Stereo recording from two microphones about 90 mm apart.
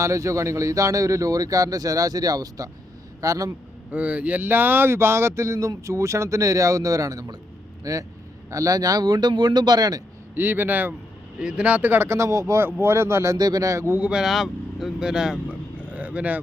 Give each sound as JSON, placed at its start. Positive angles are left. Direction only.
{"t": 0.0, "sound": "a man's voice", "side_deg": -35}
{"t": 3.9, "sound": "a man's voice", "side_deg": -15}
{"t": 10.3, "sound": "speech", "side_deg": -20}
{"t": 13.3, "sound": "speech", "side_deg": -45}
{"t": 13.9, "sound": "speech", "side_deg": -10}